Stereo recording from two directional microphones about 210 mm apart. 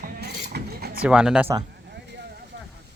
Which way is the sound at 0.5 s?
45° right (ahead or behind).